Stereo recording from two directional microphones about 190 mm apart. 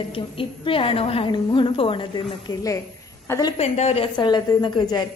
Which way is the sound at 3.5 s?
35° left (ahead or behind).